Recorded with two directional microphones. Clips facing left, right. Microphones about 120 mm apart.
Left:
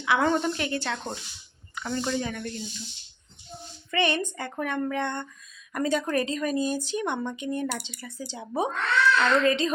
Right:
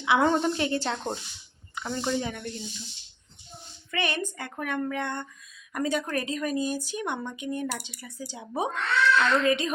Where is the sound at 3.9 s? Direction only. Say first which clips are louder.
Left 4 dB; 5° right (ahead or behind).